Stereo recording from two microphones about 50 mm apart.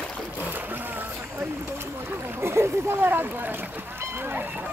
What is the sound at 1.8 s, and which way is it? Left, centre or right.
Speech, right.